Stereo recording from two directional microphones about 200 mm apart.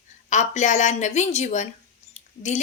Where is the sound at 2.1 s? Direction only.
35° left (ahead or behind).